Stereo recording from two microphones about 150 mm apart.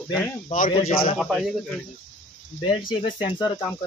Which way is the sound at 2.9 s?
35° left (ahead or behind).